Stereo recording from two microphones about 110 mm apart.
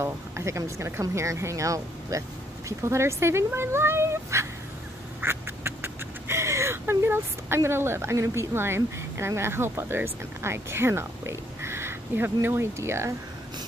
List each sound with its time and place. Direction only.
0.0 s speech: 25° right (ahead or behind)